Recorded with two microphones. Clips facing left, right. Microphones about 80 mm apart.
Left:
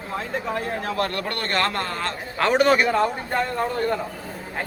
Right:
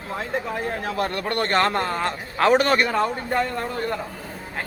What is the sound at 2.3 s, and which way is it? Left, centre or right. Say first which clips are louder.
A man's voice: even; centre.